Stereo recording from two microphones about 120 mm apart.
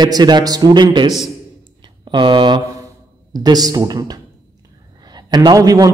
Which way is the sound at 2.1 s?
40° right (ahead or behind).